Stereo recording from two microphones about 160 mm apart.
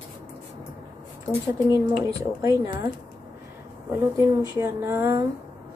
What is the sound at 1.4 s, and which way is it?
Speech, 20° right (ahead or behind).